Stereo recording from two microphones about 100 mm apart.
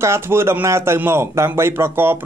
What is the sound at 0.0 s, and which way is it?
A man's voice, 25° right (ahead or behind).